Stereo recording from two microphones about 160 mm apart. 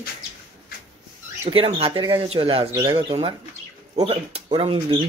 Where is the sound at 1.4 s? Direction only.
35° right (ahead or behind).